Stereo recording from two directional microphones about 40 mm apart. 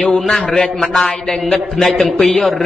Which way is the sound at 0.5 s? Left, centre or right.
Centre.